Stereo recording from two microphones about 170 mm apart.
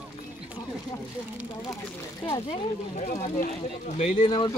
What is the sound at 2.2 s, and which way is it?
Speech, 30° left (ahead or behind).